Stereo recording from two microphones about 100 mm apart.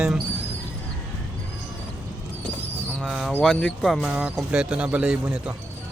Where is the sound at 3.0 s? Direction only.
Centre (ahead or behind).